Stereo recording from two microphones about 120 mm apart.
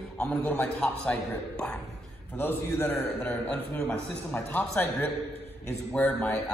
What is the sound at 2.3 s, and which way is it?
A man's voice, 15° left (ahead or behind).